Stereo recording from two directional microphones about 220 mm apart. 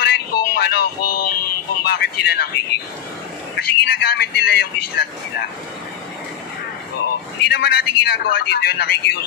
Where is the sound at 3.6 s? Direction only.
50° left (ahead or behind).